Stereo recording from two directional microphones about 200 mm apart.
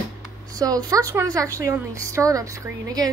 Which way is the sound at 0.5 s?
20° right (ahead or behind).